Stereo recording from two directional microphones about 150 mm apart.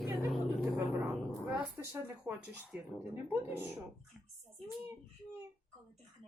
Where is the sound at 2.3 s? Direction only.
10° right (ahead or behind).